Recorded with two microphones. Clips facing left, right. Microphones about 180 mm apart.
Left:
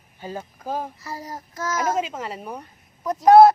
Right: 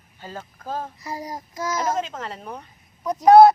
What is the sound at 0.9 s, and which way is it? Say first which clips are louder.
Child singing: right 2 dB; 15° right (ahead or behind).